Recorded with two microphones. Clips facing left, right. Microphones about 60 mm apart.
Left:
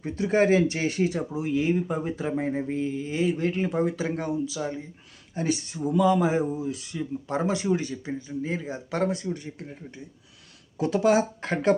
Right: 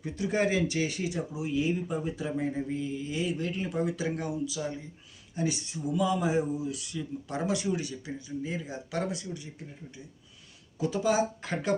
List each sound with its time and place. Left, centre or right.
0.0 s speech: left
5.3 s speech: left